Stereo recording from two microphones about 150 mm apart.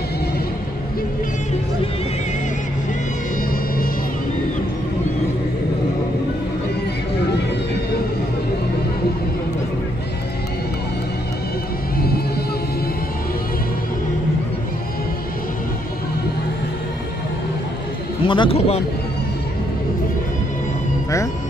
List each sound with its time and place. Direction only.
18.2 s a man's voice: 35° left (ahead or behind)